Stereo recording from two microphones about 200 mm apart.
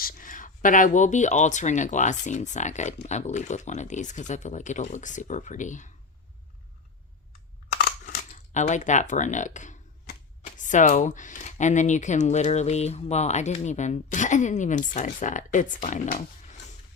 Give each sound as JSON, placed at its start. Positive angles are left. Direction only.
{"t": 0.0, "sound": "speech", "side_deg": 40}
{"t": 7.7, "sound": "a sound", "side_deg": 45}
{"t": 10.1, "sound": "speech", "side_deg": 40}